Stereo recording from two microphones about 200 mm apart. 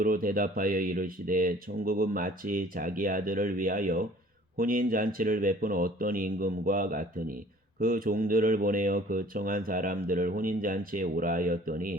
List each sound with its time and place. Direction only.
0.0 s speech: 45° right (ahead or behind)